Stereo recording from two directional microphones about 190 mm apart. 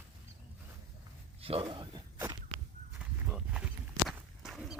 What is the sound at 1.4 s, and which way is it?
Speech, 30° right (ahead or behind).